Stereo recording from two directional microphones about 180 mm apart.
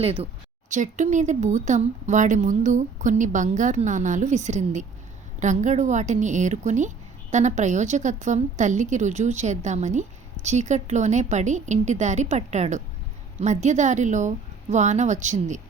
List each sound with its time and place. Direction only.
0.0 s a woman's voice: 35° right (ahead or behind)